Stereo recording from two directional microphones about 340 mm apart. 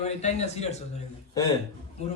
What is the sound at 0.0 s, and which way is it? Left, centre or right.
A man's voice, centre.